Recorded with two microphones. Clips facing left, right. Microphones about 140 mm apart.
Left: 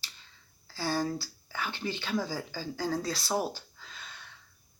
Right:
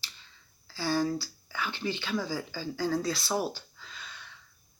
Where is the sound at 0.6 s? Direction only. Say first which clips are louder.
Right 2 dB; 45° left (ahead or behind).